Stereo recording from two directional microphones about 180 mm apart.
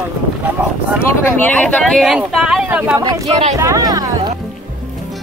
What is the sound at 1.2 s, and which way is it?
Speech, 10° left (ahead or behind).